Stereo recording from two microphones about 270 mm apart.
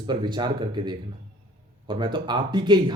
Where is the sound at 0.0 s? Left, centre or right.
Centre.